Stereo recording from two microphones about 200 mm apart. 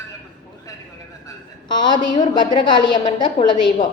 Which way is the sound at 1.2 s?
20° left (ahead or behind).